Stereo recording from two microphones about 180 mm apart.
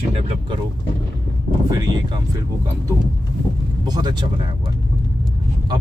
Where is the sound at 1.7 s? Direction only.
20° right (ahead or behind).